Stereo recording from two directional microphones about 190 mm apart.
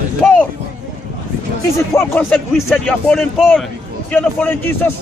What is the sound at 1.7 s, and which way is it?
A man's voice, 10° left (ahead or behind).